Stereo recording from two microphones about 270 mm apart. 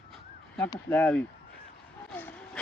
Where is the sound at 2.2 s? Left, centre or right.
Centre.